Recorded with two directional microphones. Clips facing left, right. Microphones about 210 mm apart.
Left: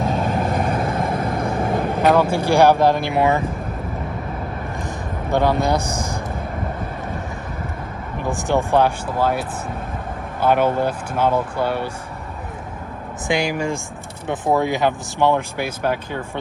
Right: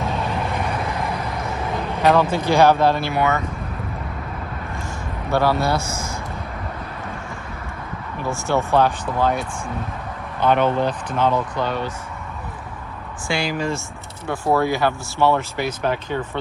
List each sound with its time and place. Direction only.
0.1 s vehicle: 45° left (ahead or behind)
2.3 s speech: 10° left (ahead or behind); by 3.4 s 30° left (ahead or behind)
5.3 s speech: 20° left (ahead or behind)
8.3 s speech: 15° left (ahead or behind)
13.2 s speech: 15° left (ahead or behind)